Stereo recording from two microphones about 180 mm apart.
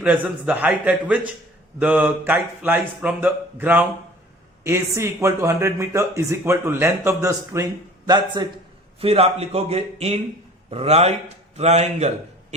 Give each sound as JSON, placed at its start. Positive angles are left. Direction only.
{"t": 0.0, "sound": "a man's voice", "side_deg": -5}